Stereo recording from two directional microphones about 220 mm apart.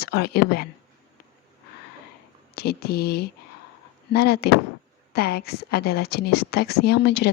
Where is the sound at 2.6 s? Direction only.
45° left (ahead or behind).